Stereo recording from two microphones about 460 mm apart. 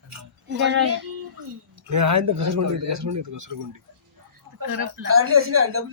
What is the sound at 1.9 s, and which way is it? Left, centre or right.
Speech, right.